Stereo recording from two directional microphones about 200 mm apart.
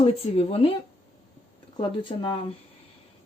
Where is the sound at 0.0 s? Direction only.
30° left (ahead or behind).